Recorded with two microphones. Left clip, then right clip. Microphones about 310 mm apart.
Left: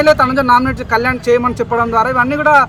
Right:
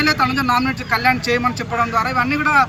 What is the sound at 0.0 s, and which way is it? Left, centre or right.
Speech, centre.